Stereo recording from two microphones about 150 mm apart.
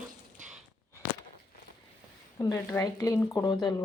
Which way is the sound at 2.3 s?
20° left (ahead or behind).